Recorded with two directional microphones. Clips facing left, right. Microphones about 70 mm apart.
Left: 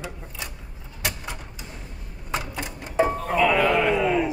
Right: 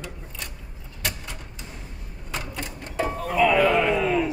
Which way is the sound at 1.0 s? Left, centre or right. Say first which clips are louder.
Left 2 dB; centre.